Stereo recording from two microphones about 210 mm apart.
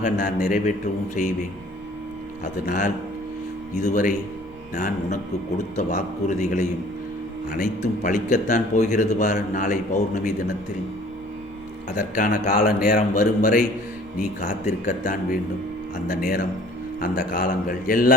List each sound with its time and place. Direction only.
0.0 s speech: 40° left (ahead or behind)
2.4 s speech: 35° left (ahead or behind)
5.7 s speech: 35° left (ahead or behind)
11.9 s a man's voice: 40° left (ahead or behind)